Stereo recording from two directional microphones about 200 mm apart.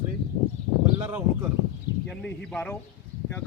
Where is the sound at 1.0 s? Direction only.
10° right (ahead or behind).